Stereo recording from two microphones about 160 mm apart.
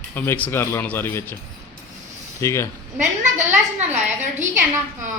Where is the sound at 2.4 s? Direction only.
15° left (ahead or behind).